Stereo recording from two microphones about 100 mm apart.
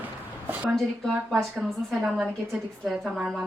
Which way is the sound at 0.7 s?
5° left (ahead or behind).